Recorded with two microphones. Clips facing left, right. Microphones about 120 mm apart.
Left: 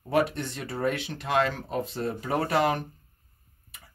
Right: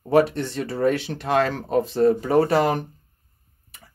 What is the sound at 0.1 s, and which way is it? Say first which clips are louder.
Speech: right 7 dB; 35° right (ahead or behind).